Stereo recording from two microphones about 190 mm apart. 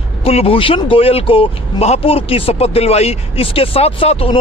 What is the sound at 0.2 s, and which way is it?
Speech, 30° left (ahead or behind).